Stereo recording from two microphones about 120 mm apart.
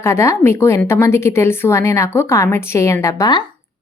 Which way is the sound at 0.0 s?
25° left (ahead or behind).